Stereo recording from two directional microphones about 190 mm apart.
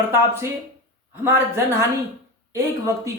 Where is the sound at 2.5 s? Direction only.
15° right (ahead or behind).